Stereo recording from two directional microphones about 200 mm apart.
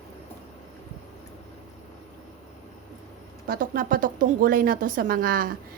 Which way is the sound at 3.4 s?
45° right (ahead or behind).